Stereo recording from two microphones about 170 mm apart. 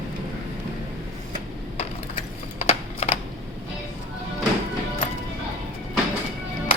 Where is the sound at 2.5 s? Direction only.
40° left (ahead or behind).